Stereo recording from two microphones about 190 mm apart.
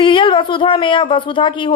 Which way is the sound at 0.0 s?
25° left (ahead or behind).